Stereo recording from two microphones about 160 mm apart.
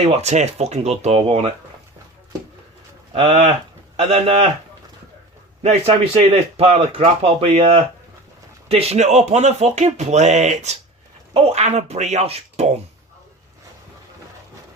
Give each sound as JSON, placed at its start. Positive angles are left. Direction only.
{"t": 0.0, "sound": "speech", "side_deg": -45}
{"t": 3.1, "sound": "speech", "side_deg": -35}
{"t": 5.6, "sound": "speech", "side_deg": -40}